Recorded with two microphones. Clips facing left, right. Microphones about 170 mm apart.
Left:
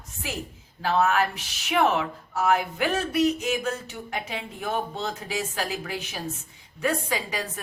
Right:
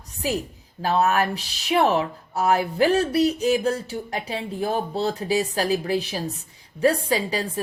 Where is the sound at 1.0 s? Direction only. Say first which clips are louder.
Right 2 dB; 35° right (ahead or behind).